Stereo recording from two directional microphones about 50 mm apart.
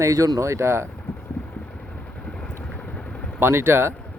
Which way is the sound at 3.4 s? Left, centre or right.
Right.